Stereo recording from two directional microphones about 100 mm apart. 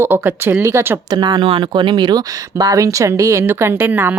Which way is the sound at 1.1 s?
45° right (ahead or behind).